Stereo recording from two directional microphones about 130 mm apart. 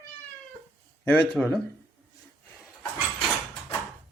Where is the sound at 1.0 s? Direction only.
10° left (ahead or behind).